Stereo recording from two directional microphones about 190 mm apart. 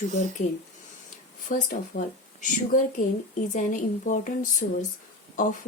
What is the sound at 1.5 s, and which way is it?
Speech, 45° left (ahead or behind).